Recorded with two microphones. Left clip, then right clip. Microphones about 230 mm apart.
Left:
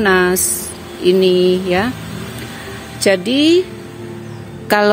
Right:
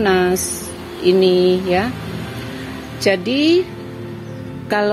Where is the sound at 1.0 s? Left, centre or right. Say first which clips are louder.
Left 1 dB; centre.